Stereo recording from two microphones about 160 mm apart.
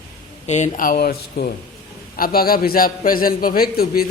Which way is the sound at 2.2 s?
65° left (ahead or behind).